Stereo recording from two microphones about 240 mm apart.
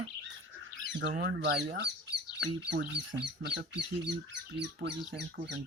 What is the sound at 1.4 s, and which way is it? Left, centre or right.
Speech, right.